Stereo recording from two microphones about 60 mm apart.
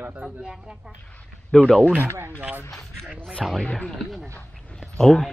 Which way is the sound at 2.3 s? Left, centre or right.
Right.